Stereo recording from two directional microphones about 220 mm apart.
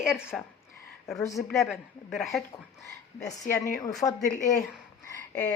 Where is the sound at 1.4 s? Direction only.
Centre (ahead or behind).